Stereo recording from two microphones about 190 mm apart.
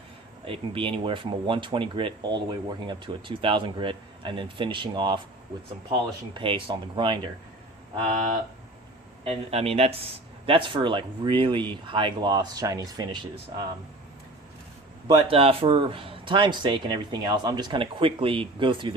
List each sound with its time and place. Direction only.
0.4 s speech: 30° right (ahead or behind)
8.0 s speech: 40° right (ahead or behind); by 13.1 s 20° right (ahead or behind)
15.0 s speech: 30° right (ahead or behind)